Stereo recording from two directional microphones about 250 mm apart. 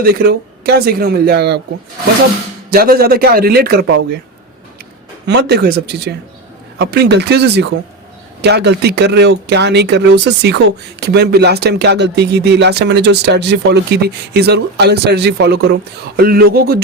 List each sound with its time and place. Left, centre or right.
0.0 s speech: right
2.6 s speech: right
5.2 s speech: right